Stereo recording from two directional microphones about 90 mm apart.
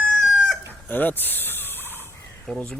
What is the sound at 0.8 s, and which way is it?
Turkey, 20° left (ahead or behind).